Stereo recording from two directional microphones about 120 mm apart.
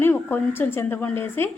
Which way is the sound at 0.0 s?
15° left (ahead or behind).